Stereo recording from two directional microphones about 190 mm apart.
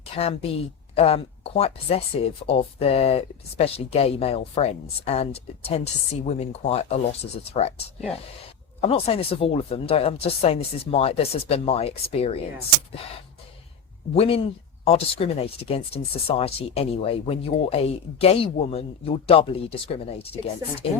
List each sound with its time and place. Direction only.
0.0 s a woman's voice: 30° left (ahead or behind)
8.8 s speech: 30° left (ahead or behind)
14.1 s speech: 30° left (ahead or behind)